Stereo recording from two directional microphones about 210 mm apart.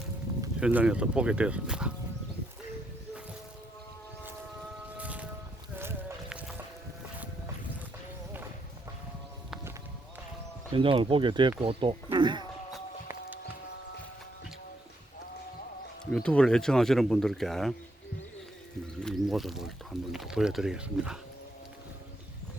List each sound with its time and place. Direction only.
0.6 s speech: 5° right (ahead or behind)
4.9 s a sound: 5° right (ahead or behind)
5.8 s music: 10° right (ahead or behind)
10.7 s speech: 25° right (ahead or behind)
16.1 s speech: 5° left (ahead or behind)
18.9 s speech: centre (ahead or behind)